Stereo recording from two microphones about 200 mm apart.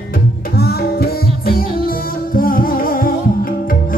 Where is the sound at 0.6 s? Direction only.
50° left (ahead or behind).